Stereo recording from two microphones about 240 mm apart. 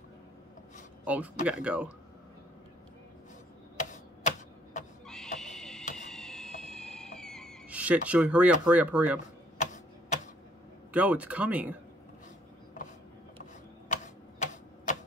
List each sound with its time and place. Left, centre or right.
1.0 s speech: centre
3.7 s tick-tock: left
5.0 s owl: centre
5.4 s a sound: centre
6.6 s music: centre
10.9 s speech: centre
14.0 s typewriter: left